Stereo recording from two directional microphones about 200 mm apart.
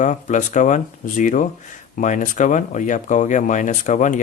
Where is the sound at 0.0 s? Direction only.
40° left (ahead or behind).